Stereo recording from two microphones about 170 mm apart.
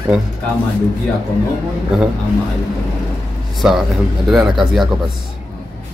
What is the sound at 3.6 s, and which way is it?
Speech, centre (ahead or behind).